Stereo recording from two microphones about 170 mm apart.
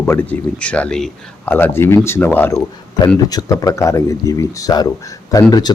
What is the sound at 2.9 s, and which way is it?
A man's voice, 25° left (ahead or behind).